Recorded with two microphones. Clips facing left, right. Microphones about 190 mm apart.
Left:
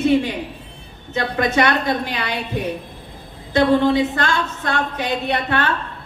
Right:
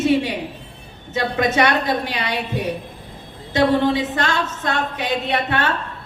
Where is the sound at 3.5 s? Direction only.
20° right (ahead or behind).